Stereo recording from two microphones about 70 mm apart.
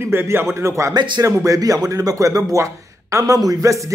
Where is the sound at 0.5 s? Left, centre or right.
Right.